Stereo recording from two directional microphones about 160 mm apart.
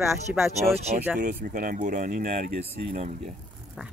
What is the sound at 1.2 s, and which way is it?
Speech, 55° right (ahead or behind).